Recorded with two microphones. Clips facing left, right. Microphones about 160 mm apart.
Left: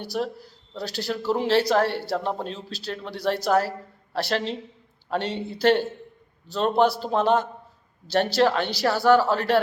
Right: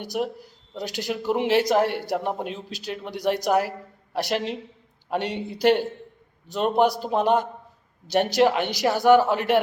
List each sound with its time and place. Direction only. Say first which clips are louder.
0.0 s speech: right 1 dB; 15° right (ahead or behind)